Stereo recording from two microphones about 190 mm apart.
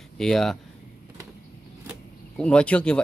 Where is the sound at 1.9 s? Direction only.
5° left (ahead or behind).